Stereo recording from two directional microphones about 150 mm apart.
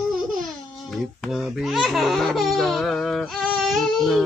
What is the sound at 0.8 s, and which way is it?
Speech, centre (ahead or behind).